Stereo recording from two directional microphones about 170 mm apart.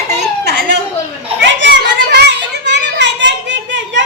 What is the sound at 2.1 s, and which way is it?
Children playing, 85° right.